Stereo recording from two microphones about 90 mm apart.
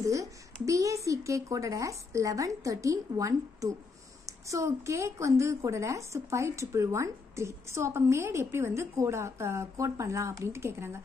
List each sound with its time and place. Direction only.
0.0 s a woman's voice: 35° right (ahead or behind)